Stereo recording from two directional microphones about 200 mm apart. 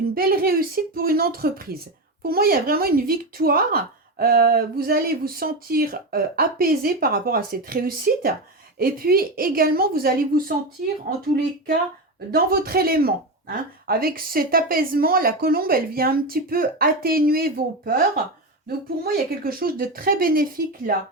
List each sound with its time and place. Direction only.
0.1 s speech: 50° right (ahead or behind)
12.3 s speech: 50° right (ahead or behind)
19.0 s speech: 50° right (ahead or behind)